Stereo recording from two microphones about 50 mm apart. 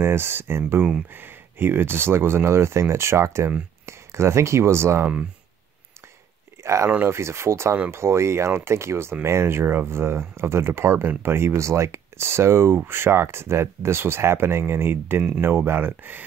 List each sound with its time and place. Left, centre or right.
0.0 s speech: right
6.6 s speech: right
7.1 s speech: right